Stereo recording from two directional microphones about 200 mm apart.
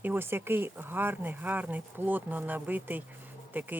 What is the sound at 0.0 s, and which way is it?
A woman's voice, 10° right (ahead or behind).